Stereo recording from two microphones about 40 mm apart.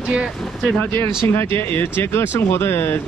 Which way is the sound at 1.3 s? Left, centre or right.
Left.